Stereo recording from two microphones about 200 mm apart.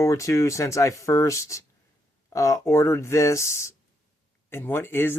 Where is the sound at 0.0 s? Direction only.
15° left (ahead or behind).